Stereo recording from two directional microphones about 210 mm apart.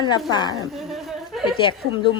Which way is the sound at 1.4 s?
25° left (ahead or behind).